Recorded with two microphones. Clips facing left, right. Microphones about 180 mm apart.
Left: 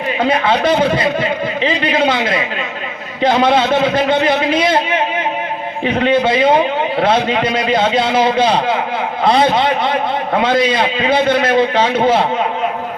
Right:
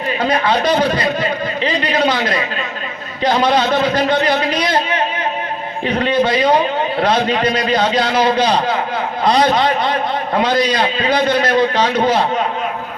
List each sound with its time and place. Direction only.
0.3 s a man's voice: 25° left (ahead or behind)
5.8 s a man's voice: 25° left (ahead or behind)